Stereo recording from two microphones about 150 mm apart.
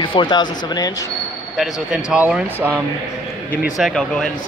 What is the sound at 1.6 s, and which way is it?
Speech, 5° right (ahead or behind).